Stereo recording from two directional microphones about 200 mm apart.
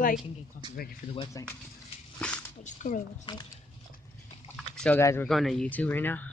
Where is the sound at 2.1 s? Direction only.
5° left (ahead or behind).